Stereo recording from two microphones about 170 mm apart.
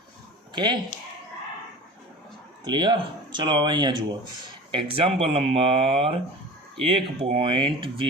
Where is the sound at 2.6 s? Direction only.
25° right (ahead or behind).